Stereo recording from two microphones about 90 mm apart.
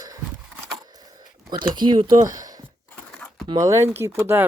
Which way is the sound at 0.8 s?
45° right (ahead or behind).